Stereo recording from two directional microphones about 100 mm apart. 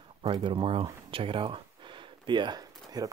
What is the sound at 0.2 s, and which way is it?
Speech, 60° right (ahead or behind).